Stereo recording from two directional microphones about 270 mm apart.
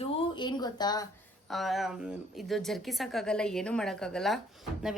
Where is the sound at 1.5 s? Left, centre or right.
Centre.